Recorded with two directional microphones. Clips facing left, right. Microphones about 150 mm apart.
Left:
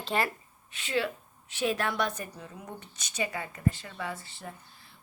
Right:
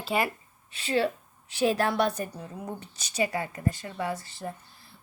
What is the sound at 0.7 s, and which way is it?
A woman's voice, 35° right (ahead or behind).